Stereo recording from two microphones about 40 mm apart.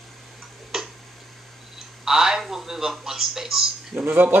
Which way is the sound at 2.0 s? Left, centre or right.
Centre.